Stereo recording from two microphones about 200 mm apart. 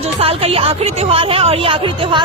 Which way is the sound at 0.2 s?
30° right (ahead or behind).